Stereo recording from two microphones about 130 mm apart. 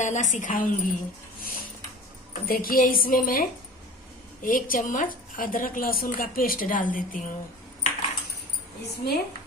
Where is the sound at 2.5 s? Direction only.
90° left.